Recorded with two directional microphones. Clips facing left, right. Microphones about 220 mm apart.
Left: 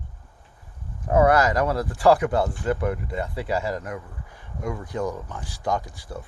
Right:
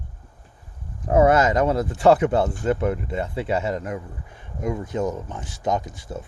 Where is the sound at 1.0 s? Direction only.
25° right (ahead or behind).